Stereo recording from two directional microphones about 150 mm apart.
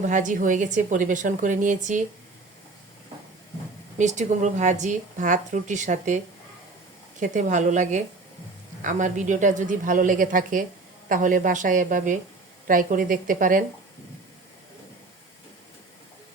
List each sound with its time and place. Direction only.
0.0 s speech: 55° right (ahead or behind)
3.9 s speech: 55° right (ahead or behind)